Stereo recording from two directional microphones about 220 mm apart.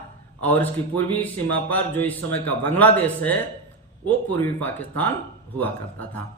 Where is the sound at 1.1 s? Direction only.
5° left (ahead or behind).